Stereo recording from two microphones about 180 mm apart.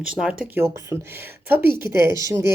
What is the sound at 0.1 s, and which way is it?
Speech, 5° right (ahead or behind).